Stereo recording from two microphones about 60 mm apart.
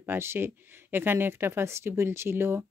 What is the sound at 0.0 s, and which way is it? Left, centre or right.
Speech, right.